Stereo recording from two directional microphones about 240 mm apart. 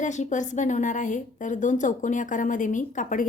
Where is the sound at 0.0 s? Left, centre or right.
Left.